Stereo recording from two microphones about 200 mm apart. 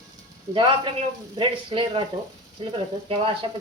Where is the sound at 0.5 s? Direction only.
25° right (ahead or behind).